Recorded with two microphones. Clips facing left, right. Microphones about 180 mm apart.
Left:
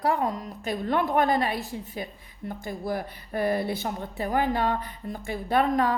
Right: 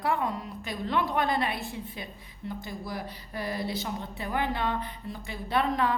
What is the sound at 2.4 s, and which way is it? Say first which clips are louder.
Speech: left 5 dB; 50° left (ahead or behind).